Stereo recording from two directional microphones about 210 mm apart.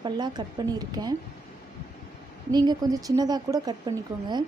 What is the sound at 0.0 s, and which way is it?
A woman's voice, 20° right (ahead or behind).